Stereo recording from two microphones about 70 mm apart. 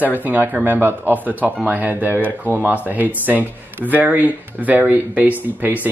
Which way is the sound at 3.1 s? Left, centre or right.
Right.